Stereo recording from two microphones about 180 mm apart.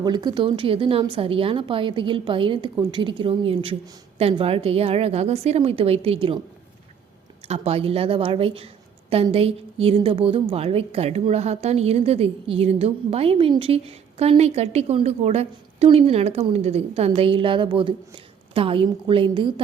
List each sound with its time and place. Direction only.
0.0 s a woman's voice: 25° right (ahead or behind)
7.4 s a woman's voice: 35° right (ahead or behind)